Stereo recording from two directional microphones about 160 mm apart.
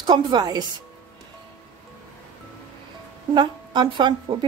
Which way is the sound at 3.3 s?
30° right (ahead or behind).